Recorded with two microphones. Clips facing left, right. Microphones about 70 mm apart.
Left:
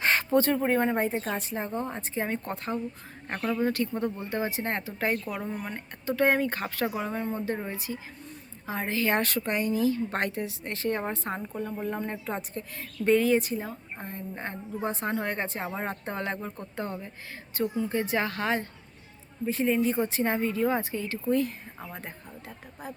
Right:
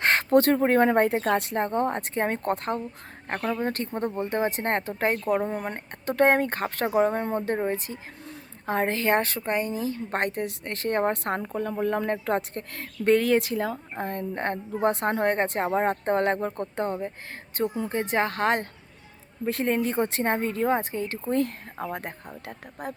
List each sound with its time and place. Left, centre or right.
0.0 s speech: right
3.2 s speech: right
3.6 s speech: right
5.0 s speech: right
9.0 s speech: right
19.5 s speech: right